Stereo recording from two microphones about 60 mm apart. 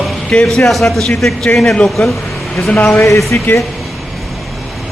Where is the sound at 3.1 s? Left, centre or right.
Left.